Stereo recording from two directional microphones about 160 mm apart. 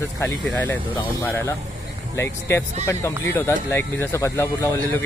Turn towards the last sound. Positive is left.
turn(degrees=15)  # may be behind; listen again after turning